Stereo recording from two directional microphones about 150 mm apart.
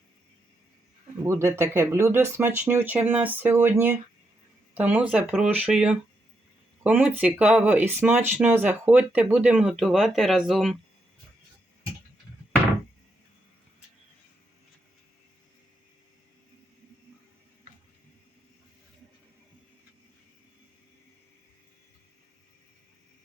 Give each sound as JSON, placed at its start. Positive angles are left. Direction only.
{"t": 1.2, "sound": "speech", "side_deg": -20}